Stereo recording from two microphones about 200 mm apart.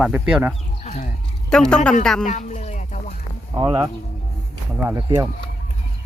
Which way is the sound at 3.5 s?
20° right (ahead or behind).